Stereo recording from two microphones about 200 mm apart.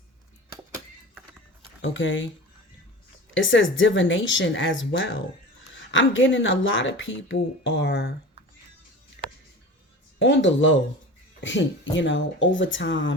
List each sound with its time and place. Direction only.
0.5 s music: 15° right (ahead or behind)
1.8 s speech: 70° left (ahead or behind)
3.3 s speech: 70° left (ahead or behind)
10.2 s speech: 65° left (ahead or behind)